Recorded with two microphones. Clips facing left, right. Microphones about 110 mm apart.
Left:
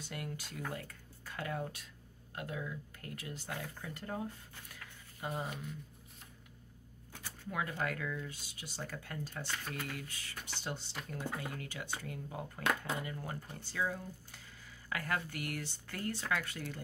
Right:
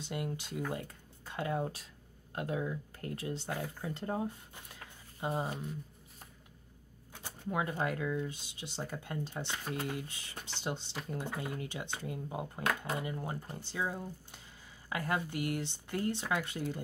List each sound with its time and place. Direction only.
0.0 s speech: 20° right (ahead or behind)
7.1 s speech: 25° right (ahead or behind)